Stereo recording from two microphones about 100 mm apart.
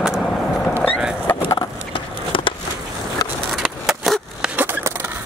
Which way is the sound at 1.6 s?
60° left (ahead or behind).